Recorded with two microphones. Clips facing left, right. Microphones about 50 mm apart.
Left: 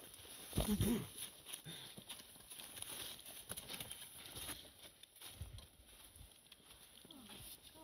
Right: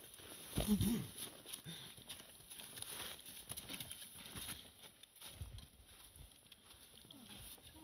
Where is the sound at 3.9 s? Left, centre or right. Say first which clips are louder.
Even; centre.